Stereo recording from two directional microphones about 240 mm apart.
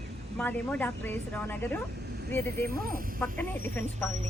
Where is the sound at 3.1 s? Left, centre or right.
Centre.